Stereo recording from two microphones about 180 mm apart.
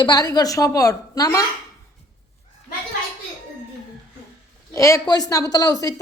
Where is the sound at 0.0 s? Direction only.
20° left (ahead or behind).